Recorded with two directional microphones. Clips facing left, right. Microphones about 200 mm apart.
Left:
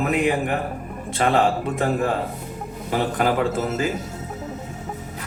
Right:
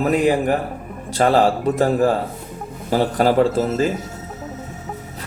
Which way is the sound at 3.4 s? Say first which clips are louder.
Right 4 dB; centre (ahead or behind).